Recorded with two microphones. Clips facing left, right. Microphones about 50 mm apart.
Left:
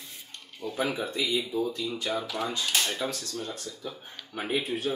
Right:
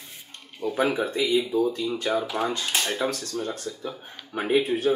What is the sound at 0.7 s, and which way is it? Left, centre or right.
Speech, right.